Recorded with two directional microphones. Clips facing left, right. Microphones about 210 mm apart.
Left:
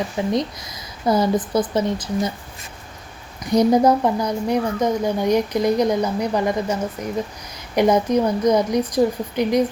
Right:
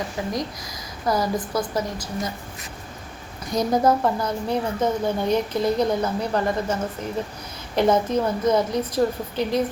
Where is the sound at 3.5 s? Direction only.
20° left (ahead or behind).